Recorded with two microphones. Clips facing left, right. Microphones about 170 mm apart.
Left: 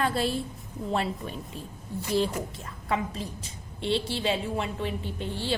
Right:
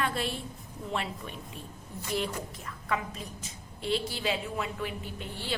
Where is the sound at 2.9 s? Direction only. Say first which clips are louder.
Left 4 dB; 30° left (ahead or behind).